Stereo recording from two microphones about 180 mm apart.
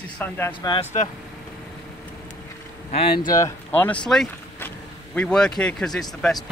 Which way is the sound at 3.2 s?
20° left (ahead or behind).